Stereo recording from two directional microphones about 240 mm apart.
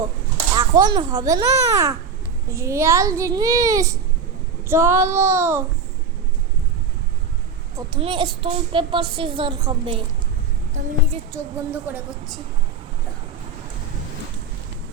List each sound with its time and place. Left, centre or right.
0.5 s a child's voice: centre
7.8 s a woman's voice: right
11.3 s a child's voice: centre